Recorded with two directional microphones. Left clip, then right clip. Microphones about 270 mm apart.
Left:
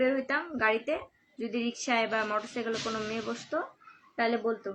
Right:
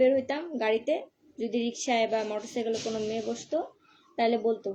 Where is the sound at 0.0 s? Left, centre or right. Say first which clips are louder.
Right 4 dB; centre.